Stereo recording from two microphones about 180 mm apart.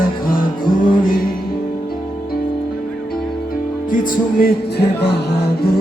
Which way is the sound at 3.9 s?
50° left (ahead or behind).